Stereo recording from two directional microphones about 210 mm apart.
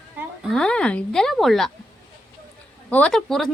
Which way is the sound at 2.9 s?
5° left (ahead or behind).